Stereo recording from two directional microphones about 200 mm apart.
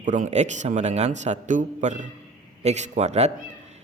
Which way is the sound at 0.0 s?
40° right (ahead or behind).